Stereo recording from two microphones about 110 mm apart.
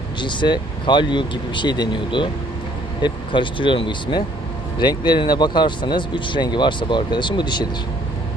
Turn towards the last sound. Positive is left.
turn(degrees=40)  # may be behind; listen again after turning